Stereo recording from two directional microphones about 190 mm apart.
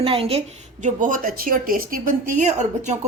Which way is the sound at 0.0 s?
30° right (ahead or behind).